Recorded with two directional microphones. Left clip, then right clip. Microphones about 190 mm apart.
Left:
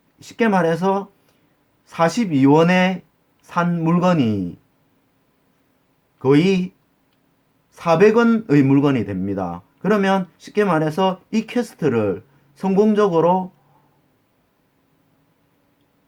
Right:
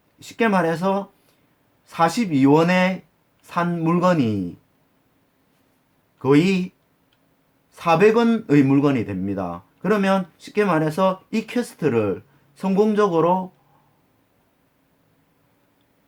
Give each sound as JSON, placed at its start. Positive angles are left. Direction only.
{"t": 0.2, "sound": "speech", "side_deg": 15}
{"t": 6.1, "sound": "speech", "side_deg": 10}
{"t": 7.7, "sound": "speech", "side_deg": 15}